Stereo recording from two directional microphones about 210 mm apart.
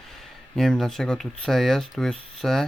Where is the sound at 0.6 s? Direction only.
Centre (ahead or behind).